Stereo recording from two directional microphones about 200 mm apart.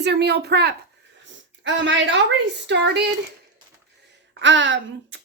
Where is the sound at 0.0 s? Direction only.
55° right (ahead or behind).